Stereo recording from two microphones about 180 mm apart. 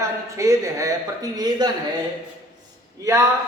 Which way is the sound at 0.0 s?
15° right (ahead or behind).